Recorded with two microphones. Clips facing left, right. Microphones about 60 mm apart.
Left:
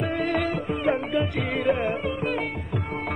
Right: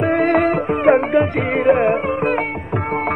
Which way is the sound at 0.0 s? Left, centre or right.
Right.